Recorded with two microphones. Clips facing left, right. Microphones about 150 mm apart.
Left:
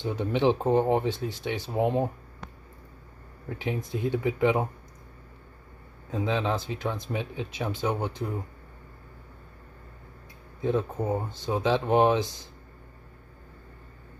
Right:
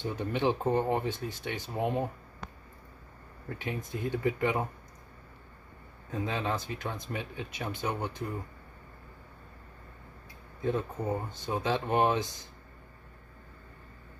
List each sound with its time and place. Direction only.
0.0 s speech: 20° left (ahead or behind)
3.4 s speech: 20° left (ahead or behind)
6.1 s speech: 25° left (ahead or behind)
10.6 s speech: 25° left (ahead or behind)